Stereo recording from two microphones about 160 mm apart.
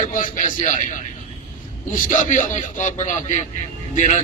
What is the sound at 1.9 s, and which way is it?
A man's voice, 55° left (ahead or behind).